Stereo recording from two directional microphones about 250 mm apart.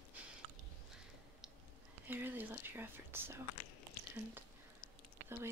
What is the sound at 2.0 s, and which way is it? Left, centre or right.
Whispering, centre.